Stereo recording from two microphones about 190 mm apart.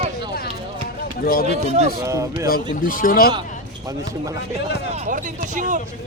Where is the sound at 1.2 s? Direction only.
50° left (ahead or behind).